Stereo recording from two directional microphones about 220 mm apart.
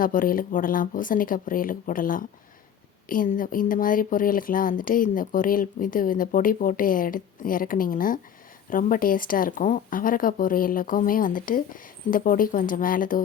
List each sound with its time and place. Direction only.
0.0 s speech: 40° left (ahead or behind)